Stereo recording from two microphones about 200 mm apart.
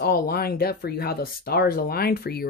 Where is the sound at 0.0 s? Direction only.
50° left (ahead or behind).